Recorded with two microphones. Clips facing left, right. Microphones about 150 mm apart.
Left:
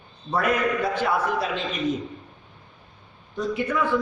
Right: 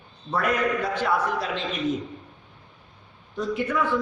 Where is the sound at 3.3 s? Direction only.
Centre (ahead or behind).